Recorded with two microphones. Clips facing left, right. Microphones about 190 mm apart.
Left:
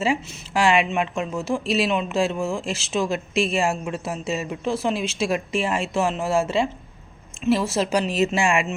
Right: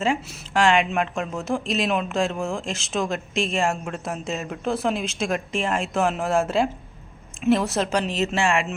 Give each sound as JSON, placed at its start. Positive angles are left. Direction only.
{"t": 0.0, "sound": "speech", "side_deg": 5}